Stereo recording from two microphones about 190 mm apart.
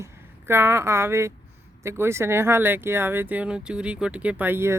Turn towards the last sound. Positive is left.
turn(degrees=-10)  # may be behind; listen again after turning